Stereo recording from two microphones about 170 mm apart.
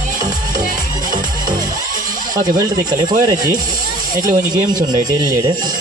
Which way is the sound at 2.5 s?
20° right (ahead or behind).